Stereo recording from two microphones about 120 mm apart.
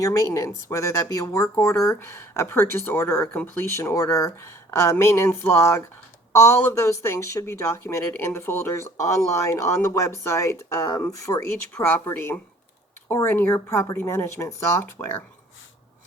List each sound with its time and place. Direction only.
0.0 s speech: 25° left (ahead or behind)